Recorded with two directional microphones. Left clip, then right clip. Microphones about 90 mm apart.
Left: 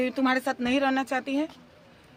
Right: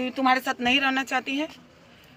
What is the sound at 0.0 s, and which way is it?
A woman's voice, 35° left (ahead or behind).